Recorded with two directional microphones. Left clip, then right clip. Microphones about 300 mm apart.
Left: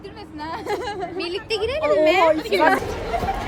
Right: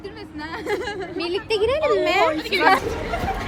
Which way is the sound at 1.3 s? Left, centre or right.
Centre.